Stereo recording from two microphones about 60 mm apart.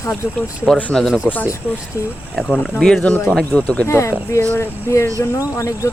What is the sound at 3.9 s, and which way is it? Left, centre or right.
Speech, left.